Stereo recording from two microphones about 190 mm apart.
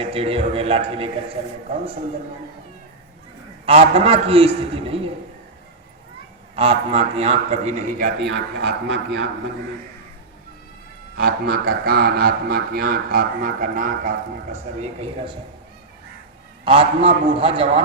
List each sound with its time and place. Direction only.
0.0 s a man's voice: 30° right (ahead or behind)
3.7 s a man's voice: 30° right (ahead or behind)
6.6 s a man's voice: 30° right (ahead or behind); by 9.2 s 60° right (ahead or behind)
11.2 s a man's voice: 55° right (ahead or behind); by 15.3 s 35° right (ahead or behind)
16.6 s a man's voice: 30° right (ahead or behind)